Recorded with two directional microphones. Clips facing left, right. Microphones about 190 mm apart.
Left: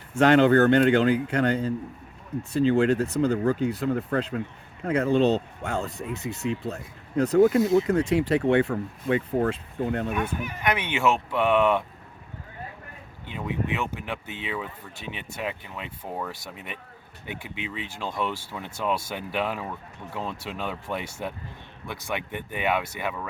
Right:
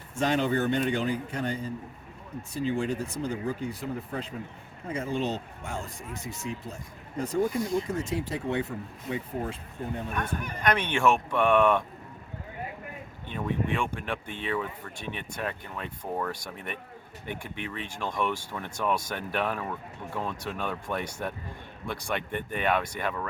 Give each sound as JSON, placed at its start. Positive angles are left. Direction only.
{"t": 0.2, "sound": "speech", "side_deg": 70}
{"t": 10.1, "sound": "speech", "side_deg": 5}
{"t": 13.2, "sound": "speech", "side_deg": 10}